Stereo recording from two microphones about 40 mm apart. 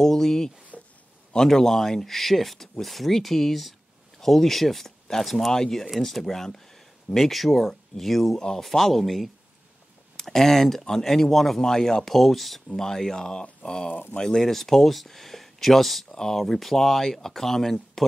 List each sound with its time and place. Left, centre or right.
0.0 s speech: centre
0.7 s a sound: left
1.3 s speech: centre
8.4 s speech: centre
8.6 s speech: centre
14.5 s speech: centre